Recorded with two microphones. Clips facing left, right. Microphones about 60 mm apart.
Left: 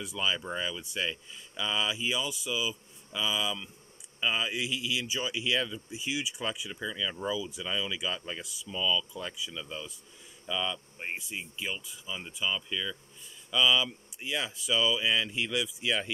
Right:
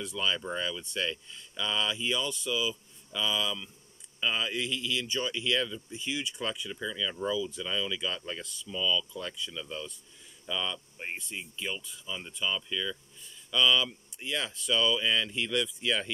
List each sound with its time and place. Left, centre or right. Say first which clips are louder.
0.0 s speech: even; centre